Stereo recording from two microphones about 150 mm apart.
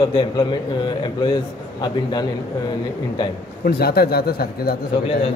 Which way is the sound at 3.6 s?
90° left.